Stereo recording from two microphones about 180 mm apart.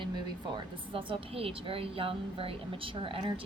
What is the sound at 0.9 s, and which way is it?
A woman's voice, 30° right (ahead or behind).